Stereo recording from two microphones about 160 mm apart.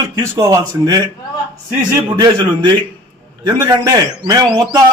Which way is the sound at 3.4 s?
25° right (ahead or behind).